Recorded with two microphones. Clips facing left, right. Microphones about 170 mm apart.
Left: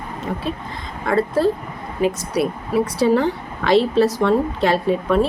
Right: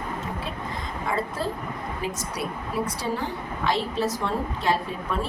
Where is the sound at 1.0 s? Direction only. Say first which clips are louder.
Left 11 dB; 75° left (ahead or behind).